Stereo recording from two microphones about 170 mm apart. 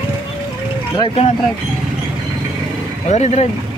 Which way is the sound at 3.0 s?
40° left (ahead or behind).